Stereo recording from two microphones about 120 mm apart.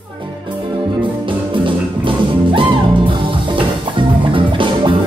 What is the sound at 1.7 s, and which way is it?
Music, 45° right (ahead or behind).